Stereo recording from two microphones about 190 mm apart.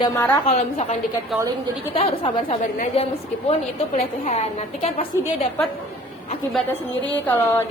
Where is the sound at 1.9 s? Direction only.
30° left (ahead or behind).